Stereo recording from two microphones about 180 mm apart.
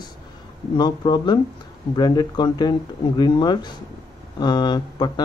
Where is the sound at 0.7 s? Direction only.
25° left (ahead or behind).